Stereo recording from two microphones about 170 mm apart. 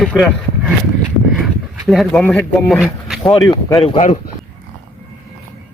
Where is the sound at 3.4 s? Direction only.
20° left (ahead or behind).